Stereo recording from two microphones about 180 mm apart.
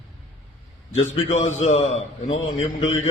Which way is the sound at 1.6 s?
35° left (ahead or behind).